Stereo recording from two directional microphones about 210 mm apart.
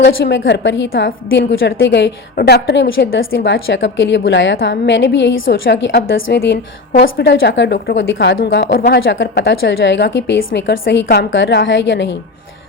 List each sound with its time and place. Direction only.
0.0 s a woman's voice: 55° left (ahead or behind)